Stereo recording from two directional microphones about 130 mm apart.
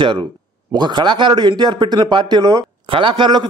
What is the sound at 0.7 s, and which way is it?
A man's voice, 35° right (ahead or behind).